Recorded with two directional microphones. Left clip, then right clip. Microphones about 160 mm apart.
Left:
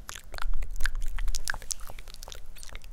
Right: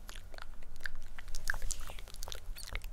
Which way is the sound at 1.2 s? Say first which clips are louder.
Left 5 dB; 30° left (ahead or behind).